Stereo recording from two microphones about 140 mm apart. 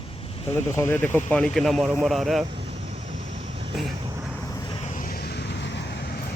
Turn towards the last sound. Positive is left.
turn(degrees=80)